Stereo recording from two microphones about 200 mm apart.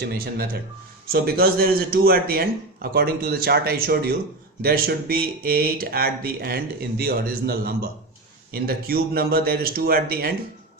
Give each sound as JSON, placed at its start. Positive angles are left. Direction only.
{"t": 0.0, "sound": "speech", "side_deg": -50}